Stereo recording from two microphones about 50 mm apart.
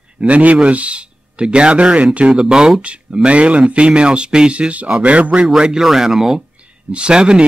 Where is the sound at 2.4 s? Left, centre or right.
Centre.